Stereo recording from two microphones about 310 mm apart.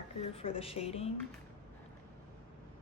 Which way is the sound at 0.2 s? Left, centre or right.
Centre.